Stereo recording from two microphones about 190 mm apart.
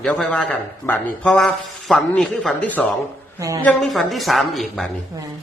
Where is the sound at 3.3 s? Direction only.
15° right (ahead or behind).